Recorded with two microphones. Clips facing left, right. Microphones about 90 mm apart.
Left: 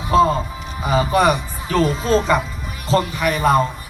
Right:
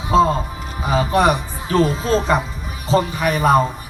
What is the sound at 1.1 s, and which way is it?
Speech, 20° right (ahead or behind).